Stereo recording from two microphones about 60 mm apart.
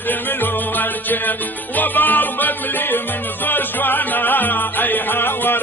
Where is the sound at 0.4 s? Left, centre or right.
Left.